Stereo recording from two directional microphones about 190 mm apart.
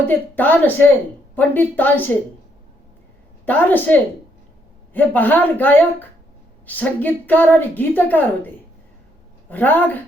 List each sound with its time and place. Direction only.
0.0 s a woman's voice: 10° left (ahead or behind)
3.4 s a woman's voice: 10° left (ahead or behind)
9.5 s a woman's voice: 10° left (ahead or behind)